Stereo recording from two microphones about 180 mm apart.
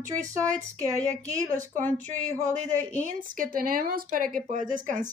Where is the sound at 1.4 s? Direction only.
45° right (ahead or behind).